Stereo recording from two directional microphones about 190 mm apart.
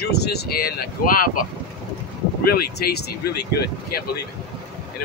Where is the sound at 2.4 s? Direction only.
55° left (ahead or behind).